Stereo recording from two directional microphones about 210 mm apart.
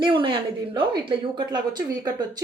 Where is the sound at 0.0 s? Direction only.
25° right (ahead or behind).